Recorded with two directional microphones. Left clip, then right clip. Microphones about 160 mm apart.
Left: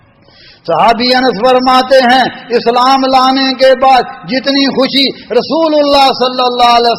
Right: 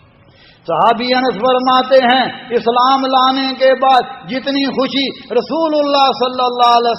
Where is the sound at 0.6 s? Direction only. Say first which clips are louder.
Left 4 dB; 30° left (ahead or behind).